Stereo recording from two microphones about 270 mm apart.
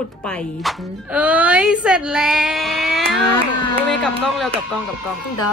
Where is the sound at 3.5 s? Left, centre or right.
Left.